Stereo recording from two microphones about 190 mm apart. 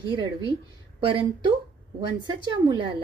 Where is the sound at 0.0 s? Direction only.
25° right (ahead or behind).